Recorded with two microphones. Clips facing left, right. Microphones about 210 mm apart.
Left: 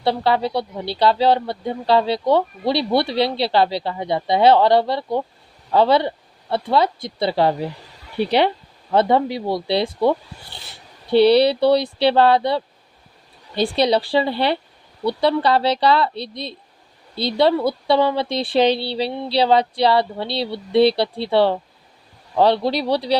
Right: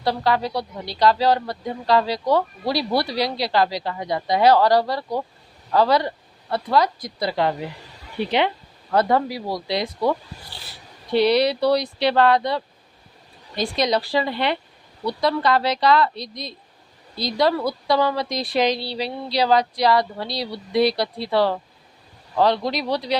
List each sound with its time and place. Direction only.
0.0 s speech: 25° left (ahead or behind)
8.9 s speech: 25° left (ahead or behind)